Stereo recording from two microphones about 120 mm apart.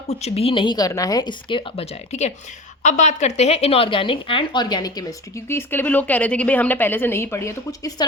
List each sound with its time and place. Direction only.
0.1 s a woman's voice: 60° left (ahead or behind); by 1.9 s 45° left (ahead or behind)
2.8 s a woman's voice: 90° left; by 5.0 s 35° left (ahead or behind)
5.5 s a woman's voice: 20° left (ahead or behind)